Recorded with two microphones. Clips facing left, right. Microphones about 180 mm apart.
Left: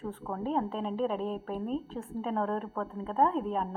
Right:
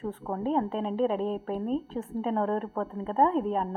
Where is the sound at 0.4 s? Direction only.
Centre (ahead or behind).